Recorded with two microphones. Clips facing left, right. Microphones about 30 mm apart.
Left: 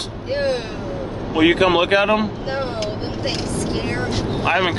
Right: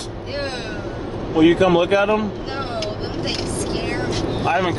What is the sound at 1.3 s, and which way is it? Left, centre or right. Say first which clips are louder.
Speech: right 1 dB; left.